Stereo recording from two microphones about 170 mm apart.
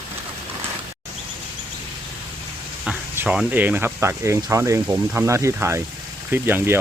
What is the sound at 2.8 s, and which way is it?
Speech, 10° right (ahead or behind).